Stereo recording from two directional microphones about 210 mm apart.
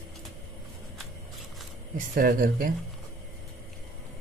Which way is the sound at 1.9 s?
40° right (ahead or behind).